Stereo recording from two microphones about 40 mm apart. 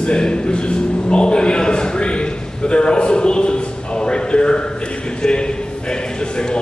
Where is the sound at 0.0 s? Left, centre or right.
Left.